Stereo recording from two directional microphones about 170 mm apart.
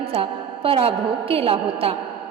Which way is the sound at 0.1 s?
35° right (ahead or behind).